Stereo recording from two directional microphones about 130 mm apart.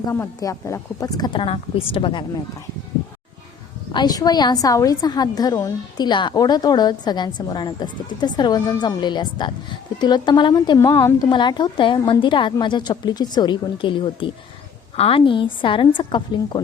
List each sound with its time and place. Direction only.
0.1 s a woman's voice: 25° left (ahead or behind); by 2.2 s 40° left (ahead or behind)
3.9 s a woman's voice: 30° left (ahead or behind)
10.8 s a woman's voice: 20° left (ahead or behind)
11.3 s a woman's voice: 35° left (ahead or behind)